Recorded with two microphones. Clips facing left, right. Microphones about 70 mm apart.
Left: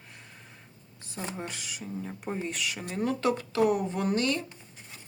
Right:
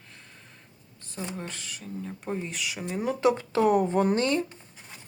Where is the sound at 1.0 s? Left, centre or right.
Centre; by 4.4 s right.